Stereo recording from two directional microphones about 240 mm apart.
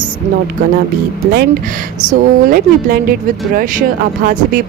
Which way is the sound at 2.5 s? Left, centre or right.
Right.